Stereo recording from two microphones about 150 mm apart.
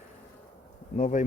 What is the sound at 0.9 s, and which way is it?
Speech, 55° left (ahead or behind).